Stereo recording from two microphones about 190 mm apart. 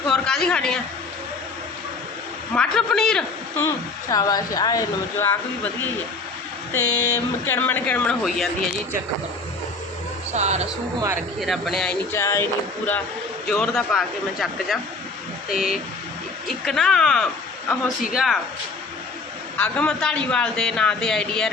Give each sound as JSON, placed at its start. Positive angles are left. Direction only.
{"t": 0.1, "sound": "a woman's voice", "side_deg": 5}
{"t": 2.6, "sound": "a man's voice", "side_deg": 5}
{"t": 4.1, "sound": "speech", "side_deg": 20}
{"t": 10.3, "sound": "speech", "side_deg": -35}
{"t": 11.3, "sound": "a man's voice", "side_deg": 0}
{"t": 12.1, "sound": "a man's voice", "side_deg": 15}
{"t": 19.5, "sound": "a man's voice", "side_deg": 5}